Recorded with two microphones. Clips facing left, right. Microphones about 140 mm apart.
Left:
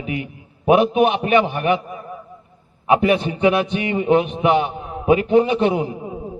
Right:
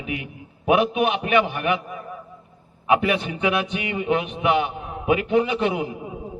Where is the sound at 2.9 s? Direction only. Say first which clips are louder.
Left 4 dB; 25° left (ahead or behind).